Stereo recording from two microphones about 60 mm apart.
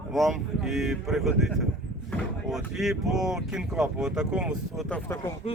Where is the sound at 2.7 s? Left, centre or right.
Centre.